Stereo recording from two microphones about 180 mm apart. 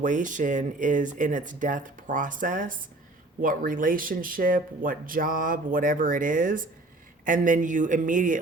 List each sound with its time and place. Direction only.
0.0 s speech: 45° right (ahead or behind)